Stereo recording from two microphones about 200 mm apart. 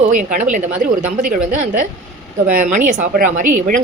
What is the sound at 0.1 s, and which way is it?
A woman's voice, 40° right (ahead or behind).